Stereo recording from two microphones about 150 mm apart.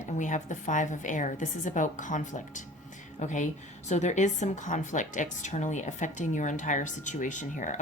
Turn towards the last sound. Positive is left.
turn(degrees=55)  # may be behind; listen again after turning